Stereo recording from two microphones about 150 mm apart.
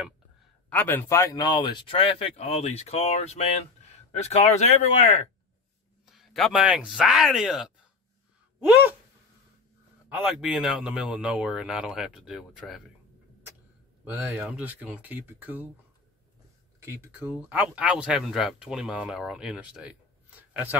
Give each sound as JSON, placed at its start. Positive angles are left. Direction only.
{"t": 0.7, "sound": "speech", "side_deg": 10}
{"t": 6.0, "sound": "speech", "side_deg": 0}
{"t": 10.1, "sound": "speech", "side_deg": -5}
{"t": 14.0, "sound": "speech", "side_deg": -10}
{"t": 16.8, "sound": "speech", "side_deg": -15}